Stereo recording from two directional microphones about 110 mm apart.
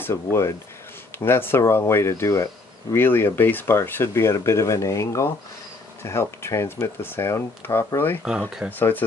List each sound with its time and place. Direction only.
0.0 s speech: 25° left (ahead or behind)
8.2 s speech: 10° right (ahead or behind)
8.7 s speech: 15° left (ahead or behind)